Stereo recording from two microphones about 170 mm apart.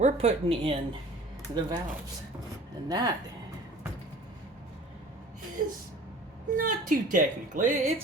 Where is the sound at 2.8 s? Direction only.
25° right (ahead or behind).